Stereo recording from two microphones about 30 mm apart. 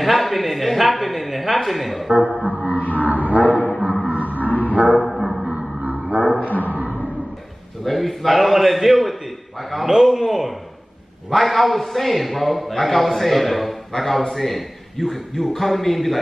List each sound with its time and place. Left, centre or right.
0.0 s a man's voice: centre
2.4 s music: right
3.0 s a sound: right
3.3 s a man's voice: left
4.1 s a sound: right
4.5 s dog: left
4.7 s dog: right
5.0 s music: centre
5.8 s a sound: right
6.2 s a sound: left
7.8 s a man's voice: centre
11.2 s a man's voice: centre